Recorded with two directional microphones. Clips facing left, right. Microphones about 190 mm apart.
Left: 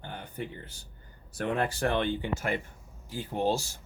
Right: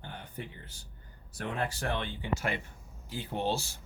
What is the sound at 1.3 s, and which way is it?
Speech, 60° left (ahead or behind).